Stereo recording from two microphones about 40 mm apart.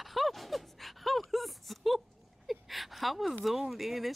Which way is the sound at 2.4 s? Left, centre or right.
Centre.